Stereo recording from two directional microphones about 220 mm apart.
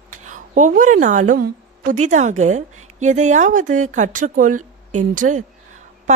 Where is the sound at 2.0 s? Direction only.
35° right (ahead or behind).